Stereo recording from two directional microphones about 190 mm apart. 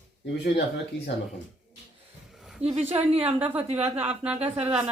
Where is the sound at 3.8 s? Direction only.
10° right (ahead or behind).